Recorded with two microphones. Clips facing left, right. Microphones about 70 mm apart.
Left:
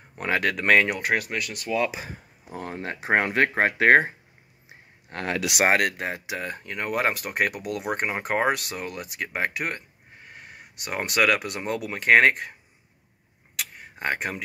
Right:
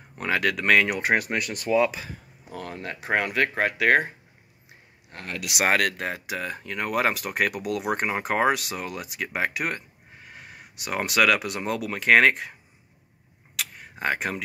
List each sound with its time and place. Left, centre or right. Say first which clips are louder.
0.2 s speech: even; centre
1.0 s speech: right 2 dB; right
2.0 s speech: left 1 dB; left
5.1 s speech: left 8 dB; left
5.9 s speech: even; centre
13.6 s tick-tock: right 2 dB; centre